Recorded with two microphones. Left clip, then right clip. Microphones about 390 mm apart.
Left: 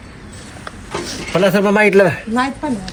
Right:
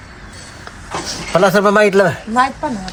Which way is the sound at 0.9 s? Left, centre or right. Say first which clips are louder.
Right 2 dB; right.